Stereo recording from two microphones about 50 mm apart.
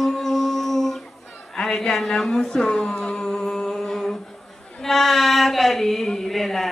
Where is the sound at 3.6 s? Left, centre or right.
Centre.